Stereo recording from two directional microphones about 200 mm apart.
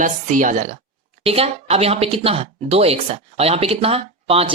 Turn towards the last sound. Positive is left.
turn(degrees=-30)  # may be behind; listen again after turning